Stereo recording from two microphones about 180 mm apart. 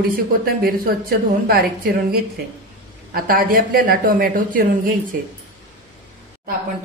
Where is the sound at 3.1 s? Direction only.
55° right (ahead or behind).